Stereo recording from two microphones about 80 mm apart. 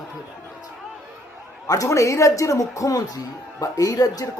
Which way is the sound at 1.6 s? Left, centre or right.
Left.